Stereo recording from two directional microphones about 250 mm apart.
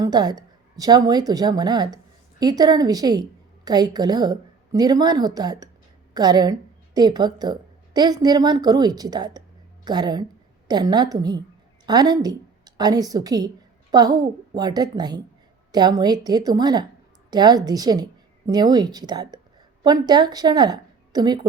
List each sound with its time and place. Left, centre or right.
0.0 s a woman's voice: centre